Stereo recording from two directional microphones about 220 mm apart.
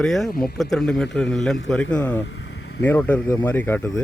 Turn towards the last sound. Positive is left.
turn(degrees=10)  # may be behind; listen again after turning